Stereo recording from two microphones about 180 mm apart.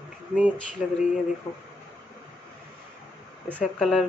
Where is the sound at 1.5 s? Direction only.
20° left (ahead or behind).